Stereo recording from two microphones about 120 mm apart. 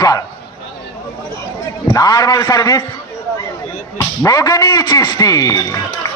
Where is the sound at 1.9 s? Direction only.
35° left (ahead or behind).